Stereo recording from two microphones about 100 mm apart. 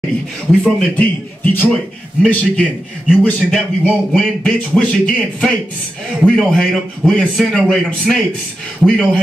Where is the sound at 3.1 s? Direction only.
10° left (ahead or behind).